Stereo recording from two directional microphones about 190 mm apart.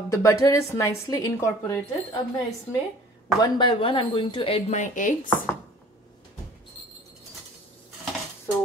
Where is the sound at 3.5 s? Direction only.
25° left (ahead or behind); by 5.3 s 45° left (ahead or behind).